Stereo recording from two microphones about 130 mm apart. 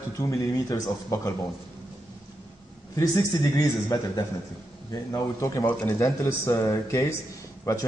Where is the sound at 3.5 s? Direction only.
30° left (ahead or behind).